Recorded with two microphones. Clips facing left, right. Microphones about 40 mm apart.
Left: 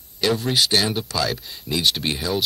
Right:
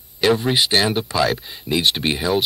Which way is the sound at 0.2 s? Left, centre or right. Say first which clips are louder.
Right 3 dB; right.